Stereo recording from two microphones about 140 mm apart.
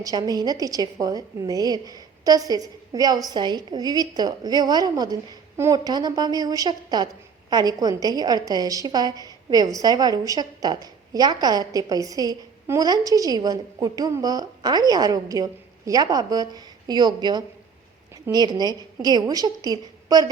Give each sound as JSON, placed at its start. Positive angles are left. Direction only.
{"t": 0.0, "sound": "a woman's voice", "side_deg": -30}